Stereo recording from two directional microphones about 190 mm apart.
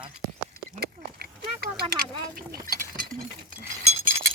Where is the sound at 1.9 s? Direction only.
50° right (ahead or behind).